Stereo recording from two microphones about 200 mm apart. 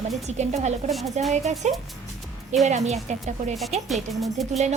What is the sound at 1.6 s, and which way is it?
A woman's voice, 35° right (ahead or behind).